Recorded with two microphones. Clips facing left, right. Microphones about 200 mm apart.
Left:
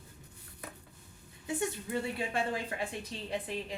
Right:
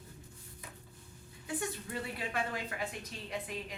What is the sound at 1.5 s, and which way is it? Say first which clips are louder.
A woman's voice: left 4 dB; 25° left (ahead or behind).